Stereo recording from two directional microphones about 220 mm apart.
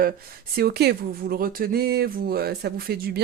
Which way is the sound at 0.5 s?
45° right (ahead or behind).